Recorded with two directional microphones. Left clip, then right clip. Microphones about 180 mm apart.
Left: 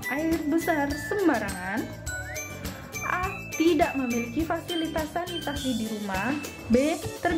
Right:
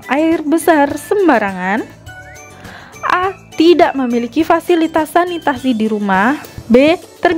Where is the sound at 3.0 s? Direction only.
55° right (ahead or behind).